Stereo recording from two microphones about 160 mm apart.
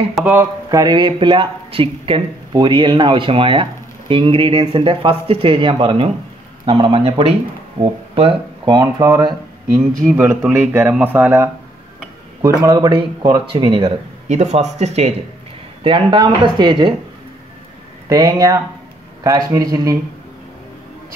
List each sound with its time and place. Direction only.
0.1 s a man's voice: 10° right (ahead or behind)
10.5 s speech: 15° right (ahead or behind)
12.6 s a man's voice: 25° right (ahead or behind); by 15.1 s 45° right (ahead or behind)
15.8 s a man's voice: 30° right (ahead or behind)
18.0 s a man's voice: 25° right (ahead or behind)